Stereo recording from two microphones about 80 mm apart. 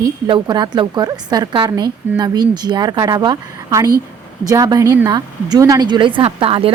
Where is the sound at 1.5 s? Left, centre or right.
Right.